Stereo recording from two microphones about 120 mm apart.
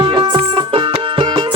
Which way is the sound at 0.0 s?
40° right (ahead or behind).